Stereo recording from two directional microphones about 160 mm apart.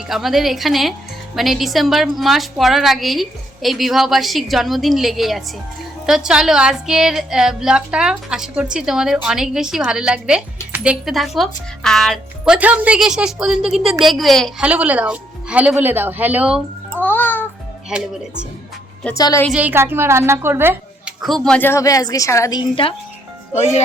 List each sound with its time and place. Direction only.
0.1 s a woman's voice: centre (ahead or behind)
12.5 s a woman's voice: 10° right (ahead or behind)
14.7 s speech: 10° right (ahead or behind)
17.0 s music: 10° left (ahead or behind)
17.9 s a woman's voice: 5° right (ahead or behind)
19.1 s a woman's voice: 20° left (ahead or behind)
19.5 s speech: 10° right (ahead or behind)
21.2 s a woman's voice: centre (ahead or behind); by 23.0 s 35° left (ahead or behind)